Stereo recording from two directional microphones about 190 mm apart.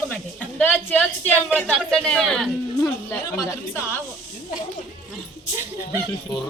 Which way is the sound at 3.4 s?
15° left (ahead or behind).